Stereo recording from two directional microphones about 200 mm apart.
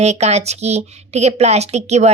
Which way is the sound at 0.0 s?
35° right (ahead or behind).